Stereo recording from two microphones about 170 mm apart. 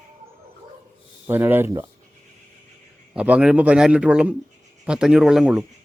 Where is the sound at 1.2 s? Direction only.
10° right (ahead or behind).